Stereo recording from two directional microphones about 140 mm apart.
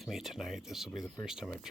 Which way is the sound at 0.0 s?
Centre (ahead or behind).